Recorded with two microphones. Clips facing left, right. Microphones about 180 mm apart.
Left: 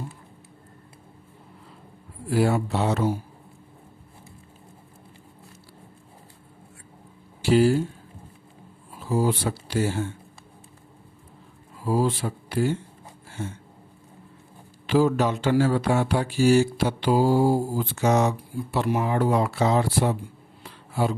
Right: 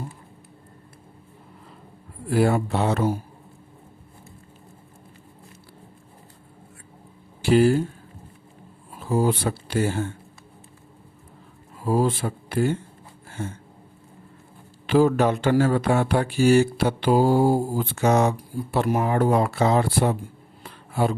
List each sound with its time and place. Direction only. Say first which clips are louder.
2.3 s speech: right 2 dB; 55° right (ahead or behind)
7.4 s speech: right 1 dB; 55° right (ahead or behind)
9.0 s speech: right 2 dB; 50° right (ahead or behind)
11.9 s speech: right 2 dB; 50° right (ahead or behind)
13.2 s a sound: right 1 dB; 50° right (ahead or behind)
14.8 s speech: right 2 dB; 55° right (ahead or behind)
20.7 s a sound: right 2 dB; 55° right (ahead or behind)